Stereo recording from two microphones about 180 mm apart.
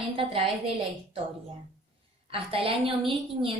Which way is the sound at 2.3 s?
30° right (ahead or behind).